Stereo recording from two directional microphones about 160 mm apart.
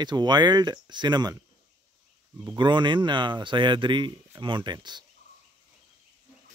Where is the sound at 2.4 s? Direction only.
30° right (ahead or behind).